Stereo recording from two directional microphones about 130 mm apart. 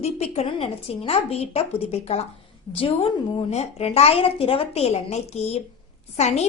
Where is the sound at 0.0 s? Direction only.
55° left (ahead or behind).